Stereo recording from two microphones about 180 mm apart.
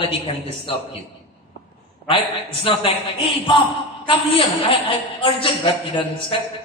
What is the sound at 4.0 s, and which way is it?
Speech, 30° left (ahead or behind).